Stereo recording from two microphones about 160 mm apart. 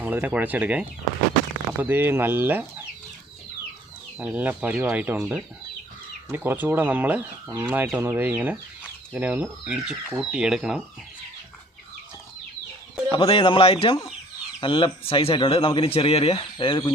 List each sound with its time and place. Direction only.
0.0 s speech: 10° right (ahead or behind)
4.2 s speech: 10° right (ahead or behind)
13.1 s speech: 35° left (ahead or behind)